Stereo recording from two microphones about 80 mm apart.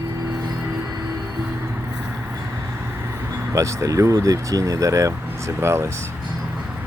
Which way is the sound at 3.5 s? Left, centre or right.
Right.